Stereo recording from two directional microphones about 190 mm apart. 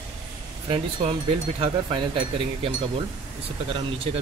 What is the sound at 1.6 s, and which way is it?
Speech, 25° right (ahead or behind).